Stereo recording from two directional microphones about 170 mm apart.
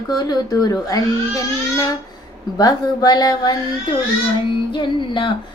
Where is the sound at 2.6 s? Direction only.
25° left (ahead or behind).